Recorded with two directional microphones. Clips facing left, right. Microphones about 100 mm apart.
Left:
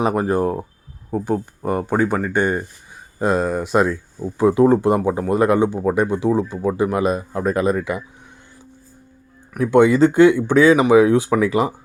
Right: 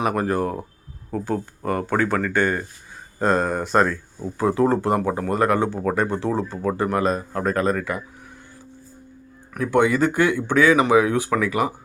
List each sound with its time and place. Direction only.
0.0 s speech: 20° left (ahead or behind)
3.2 s speech: 5° left (ahead or behind)
4.2 s speech: 20° left (ahead or behind)
9.6 s speech: 25° left (ahead or behind)